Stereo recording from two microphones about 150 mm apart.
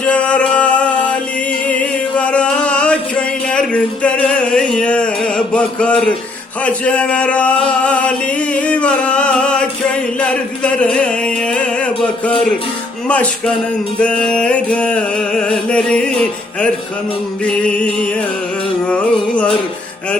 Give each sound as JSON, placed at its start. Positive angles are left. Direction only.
{"t": 0.0, "sound": "music", "side_deg": 10}
{"t": 17.4, "sound": "music", "side_deg": 5}